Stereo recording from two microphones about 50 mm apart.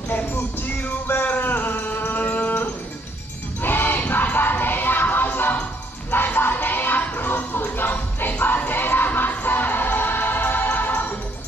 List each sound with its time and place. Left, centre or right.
0.1 s music: left